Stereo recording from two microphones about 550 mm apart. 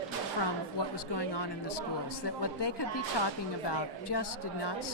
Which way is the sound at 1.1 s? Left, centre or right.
Left.